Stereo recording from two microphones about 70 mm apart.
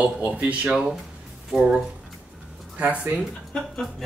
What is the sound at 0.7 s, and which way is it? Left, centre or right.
Speech, centre.